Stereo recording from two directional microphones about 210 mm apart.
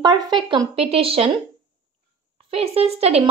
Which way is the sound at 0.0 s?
20° right (ahead or behind).